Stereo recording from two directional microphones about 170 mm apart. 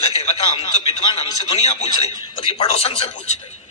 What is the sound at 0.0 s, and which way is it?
A man's voice, 35° left (ahead or behind).